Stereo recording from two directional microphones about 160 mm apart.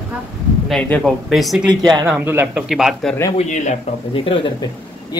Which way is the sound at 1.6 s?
30° right (ahead or behind).